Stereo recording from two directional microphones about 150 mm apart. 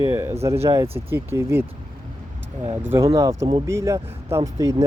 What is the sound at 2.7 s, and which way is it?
Speech, 15° right (ahead or behind).